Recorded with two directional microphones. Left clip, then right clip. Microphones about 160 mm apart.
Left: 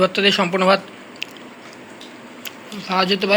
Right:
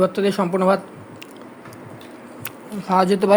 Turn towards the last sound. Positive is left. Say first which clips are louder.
# right 2 dB
turn(degrees=-50)  # may be behind; listen again after turning